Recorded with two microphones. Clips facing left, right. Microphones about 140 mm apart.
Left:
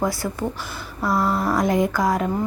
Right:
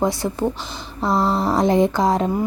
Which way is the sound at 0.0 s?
25° right (ahead or behind).